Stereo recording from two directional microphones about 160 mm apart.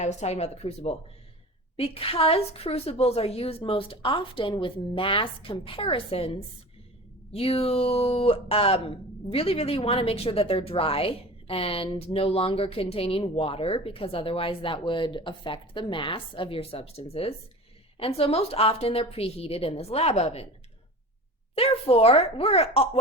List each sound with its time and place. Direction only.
0.0 s speech: 45° left (ahead or behind)
21.5 s speech: 40° left (ahead or behind)